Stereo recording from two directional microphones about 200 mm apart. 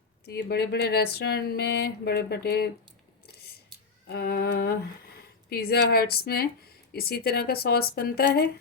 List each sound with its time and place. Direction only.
0.3 s speech: 55° left (ahead or behind)
3.2 s scissors: 50° left (ahead or behind)
4.1 s speech: 55° left (ahead or behind)